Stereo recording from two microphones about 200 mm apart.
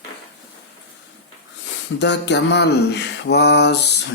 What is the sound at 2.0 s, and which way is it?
Mantra, 60° left (ahead or behind).